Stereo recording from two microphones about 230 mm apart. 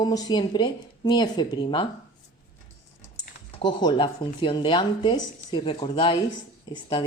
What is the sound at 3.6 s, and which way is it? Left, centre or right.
Speech, centre.